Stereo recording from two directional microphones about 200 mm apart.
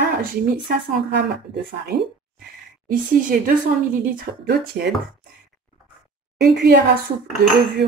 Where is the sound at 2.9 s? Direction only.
45° right (ahead or behind).